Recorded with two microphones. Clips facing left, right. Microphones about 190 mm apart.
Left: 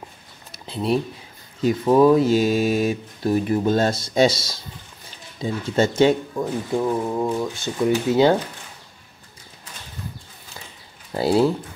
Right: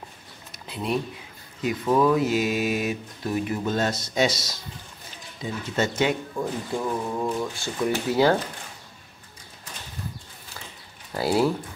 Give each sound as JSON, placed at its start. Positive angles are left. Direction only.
{"t": 0.7, "sound": "speech", "side_deg": 30}
{"t": 6.4, "sound": "speech", "side_deg": 15}
{"t": 11.1, "sound": "speech", "side_deg": 25}